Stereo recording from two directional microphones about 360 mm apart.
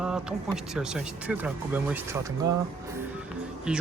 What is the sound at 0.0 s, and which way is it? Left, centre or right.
Speech, centre.